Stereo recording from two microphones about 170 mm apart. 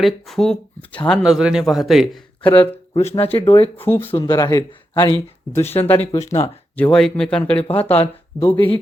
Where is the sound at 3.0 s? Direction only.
35° left (ahead or behind).